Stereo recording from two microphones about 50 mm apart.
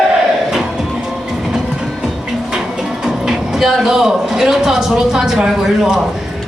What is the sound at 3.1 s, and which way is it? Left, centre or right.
A woman's voice, centre.